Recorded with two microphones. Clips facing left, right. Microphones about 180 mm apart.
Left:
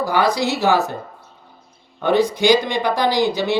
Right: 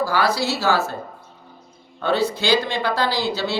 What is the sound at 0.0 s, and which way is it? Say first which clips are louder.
Speech: left 2 dB; 20° left (ahead or behind).